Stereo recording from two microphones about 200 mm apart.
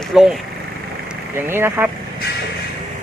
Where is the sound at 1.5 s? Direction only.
10° right (ahead or behind).